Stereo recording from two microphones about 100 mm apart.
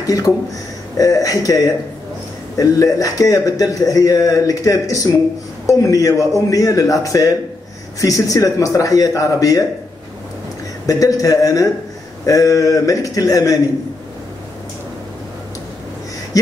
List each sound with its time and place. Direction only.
0.0 s a man's voice: 35° left (ahead or behind)
10.9 s a man's voice: 35° left (ahead or behind)